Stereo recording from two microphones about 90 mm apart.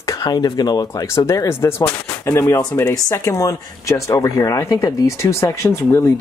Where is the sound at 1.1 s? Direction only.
35° left (ahead or behind).